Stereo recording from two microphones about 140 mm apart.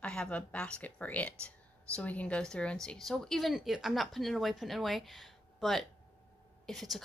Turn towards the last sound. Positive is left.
turn(degrees=0)  # may be behind; listen again after turning